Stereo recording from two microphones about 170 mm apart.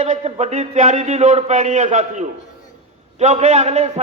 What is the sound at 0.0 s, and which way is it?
A man's voice, 40° right (ahead or behind).